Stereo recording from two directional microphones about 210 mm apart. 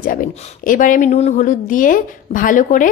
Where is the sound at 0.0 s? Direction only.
40° left (ahead or behind).